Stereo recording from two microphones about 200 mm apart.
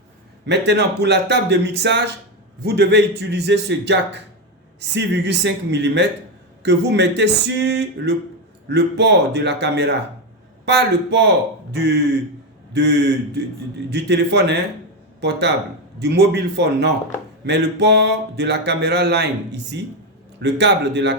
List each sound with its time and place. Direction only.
0.4 s speech: 60° right (ahead or behind)